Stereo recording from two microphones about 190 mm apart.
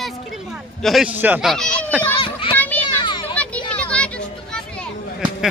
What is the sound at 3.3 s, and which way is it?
Children playing, 5° left (ahead or behind).